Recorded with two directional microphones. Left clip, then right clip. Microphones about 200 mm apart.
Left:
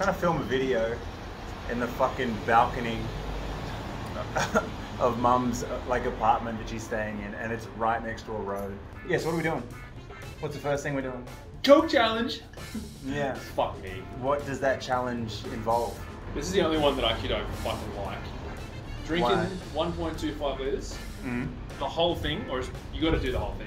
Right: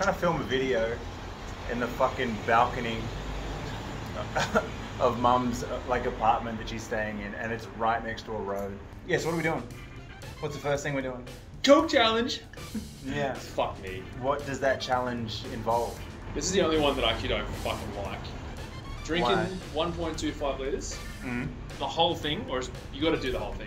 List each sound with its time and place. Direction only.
0.0 s speech: 5° left (ahead or behind)
4.4 s speech: 5° left (ahead or behind)
5.9 s speech: 5° left (ahead or behind)
11.6 s speech: 25° right (ahead or behind)
13.1 s speech: 10° left (ahead or behind)
16.5 s speech: 25° right (ahead or behind)
19.2 s speech: 5° left (ahead or behind)
19.8 s speech: 20° right (ahead or behind)
21.3 s speech: 5° left (ahead or behind)
21.7 s speech: 25° right (ahead or behind)